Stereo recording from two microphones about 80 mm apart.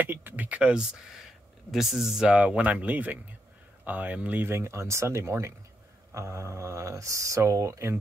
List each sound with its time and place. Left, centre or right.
0.0 s speech: right